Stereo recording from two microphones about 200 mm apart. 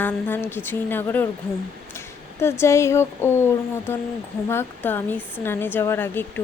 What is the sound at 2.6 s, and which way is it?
Speech, 15° left (ahead or behind).